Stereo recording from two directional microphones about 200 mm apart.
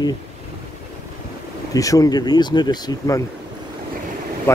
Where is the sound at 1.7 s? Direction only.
15° left (ahead or behind).